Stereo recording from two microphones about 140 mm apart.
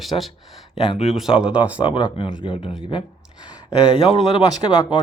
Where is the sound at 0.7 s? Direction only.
45° left (ahead or behind).